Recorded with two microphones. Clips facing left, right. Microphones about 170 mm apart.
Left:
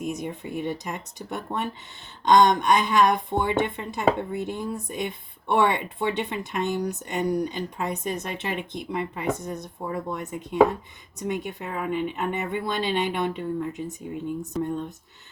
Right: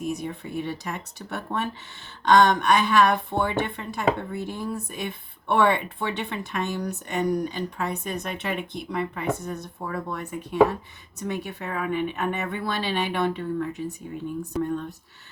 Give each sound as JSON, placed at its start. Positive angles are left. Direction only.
{"t": 0.0, "sound": "a woman's voice", "side_deg": 20}
{"t": 14.5, "sound": "speech", "side_deg": 20}